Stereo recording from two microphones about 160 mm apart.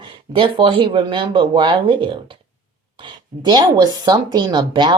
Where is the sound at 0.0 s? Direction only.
30° right (ahead or behind).